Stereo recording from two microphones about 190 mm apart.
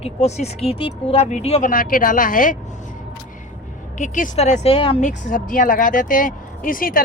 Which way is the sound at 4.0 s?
40° left (ahead or behind).